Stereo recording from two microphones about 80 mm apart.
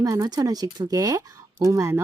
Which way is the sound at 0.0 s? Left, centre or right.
Right.